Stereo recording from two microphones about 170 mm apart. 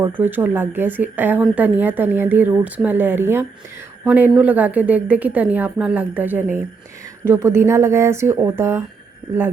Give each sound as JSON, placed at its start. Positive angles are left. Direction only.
{"t": 0.0, "sound": "speech", "side_deg": -10}